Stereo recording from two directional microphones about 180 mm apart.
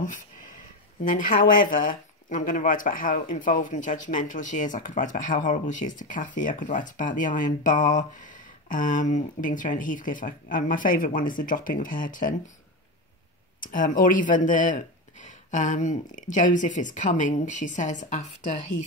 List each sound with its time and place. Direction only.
1.0 s speech: 50° left (ahead or behind)
13.6 s speech: 50° left (ahead or behind)